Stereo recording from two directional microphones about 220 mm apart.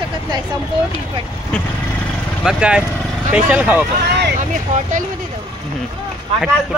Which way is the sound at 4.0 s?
50° right (ahead or behind).